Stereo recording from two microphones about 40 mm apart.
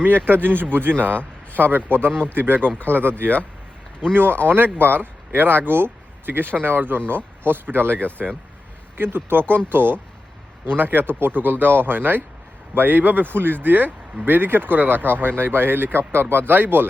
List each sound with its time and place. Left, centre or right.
0.3 s speech: right
8.0 s speech: right
9.0 s speech: right
16.5 s speech: right